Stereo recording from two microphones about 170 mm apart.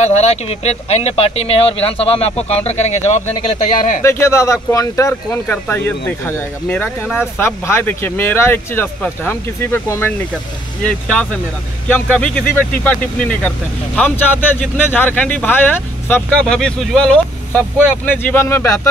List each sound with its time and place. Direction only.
0.0 s speech: 40° left (ahead or behind)
4.0 s speech: 15° left (ahead or behind)